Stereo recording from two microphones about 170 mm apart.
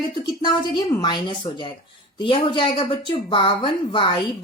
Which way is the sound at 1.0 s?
30° left (ahead or behind).